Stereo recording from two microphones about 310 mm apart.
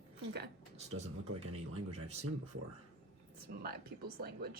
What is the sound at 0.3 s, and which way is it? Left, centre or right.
Speech, right.